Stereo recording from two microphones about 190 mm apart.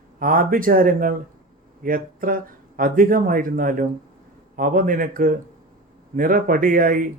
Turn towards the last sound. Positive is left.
turn(degrees=-45)  # may be behind; listen again after turning